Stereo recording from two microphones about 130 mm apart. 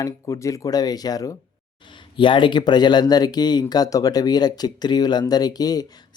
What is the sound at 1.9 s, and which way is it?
Speech, 40° left (ahead or behind).